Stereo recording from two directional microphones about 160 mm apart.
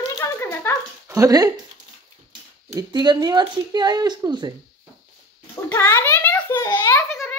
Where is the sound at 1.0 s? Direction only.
20° right (ahead or behind).